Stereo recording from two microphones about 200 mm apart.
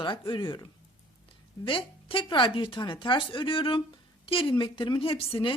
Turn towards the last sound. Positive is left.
turn(degrees=25)  # may be behind; listen again after turning